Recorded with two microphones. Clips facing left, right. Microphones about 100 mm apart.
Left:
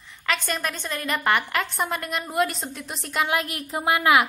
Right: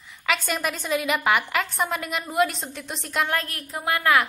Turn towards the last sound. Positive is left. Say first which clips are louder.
# left 2 dB
turn(degrees=15)  # may be behind; listen again after turning